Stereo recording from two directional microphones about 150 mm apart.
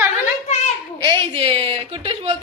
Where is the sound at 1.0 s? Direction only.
35° right (ahead or behind).